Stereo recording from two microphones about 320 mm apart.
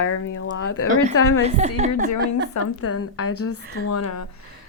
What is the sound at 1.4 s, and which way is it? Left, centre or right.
Speech, right.